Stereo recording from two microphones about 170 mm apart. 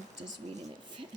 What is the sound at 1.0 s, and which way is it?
Speech, 30° right (ahead or behind).